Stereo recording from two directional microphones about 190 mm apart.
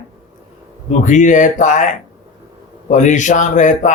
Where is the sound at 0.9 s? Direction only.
40° left (ahead or behind).